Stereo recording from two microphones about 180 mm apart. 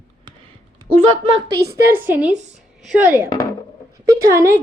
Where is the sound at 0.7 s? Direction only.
30° right (ahead or behind).